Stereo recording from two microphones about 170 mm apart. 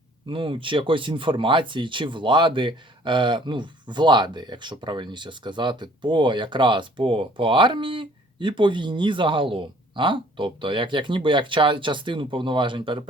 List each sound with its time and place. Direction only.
0.3 s speech: 30° right (ahead or behind)